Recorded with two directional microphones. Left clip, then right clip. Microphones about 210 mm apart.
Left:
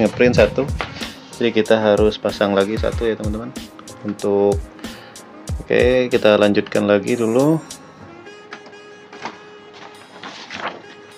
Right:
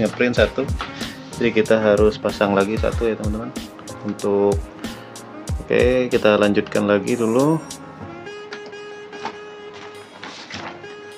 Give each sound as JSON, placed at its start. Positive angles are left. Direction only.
{"t": 0.0, "sound": "speech", "side_deg": 15}
{"t": 1.4, "sound": "speech", "side_deg": 0}